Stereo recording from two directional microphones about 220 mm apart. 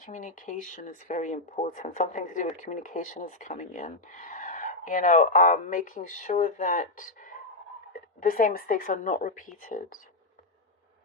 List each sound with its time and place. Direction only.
0.0 s speech: 35° left (ahead or behind)